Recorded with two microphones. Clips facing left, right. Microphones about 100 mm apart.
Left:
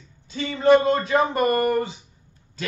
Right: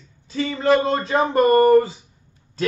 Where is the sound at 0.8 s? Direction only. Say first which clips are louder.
Even; 30° right (ahead or behind).